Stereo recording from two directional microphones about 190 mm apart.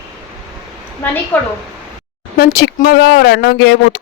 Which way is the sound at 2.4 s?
55° left (ahead or behind).